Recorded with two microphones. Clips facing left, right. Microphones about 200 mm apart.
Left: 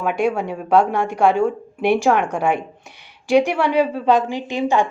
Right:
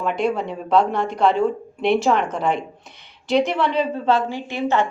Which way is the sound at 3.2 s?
10° left (ahead or behind).